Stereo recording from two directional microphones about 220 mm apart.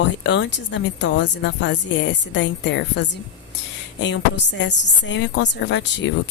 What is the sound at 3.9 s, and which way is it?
A woman's voice, 55° left (ahead or behind).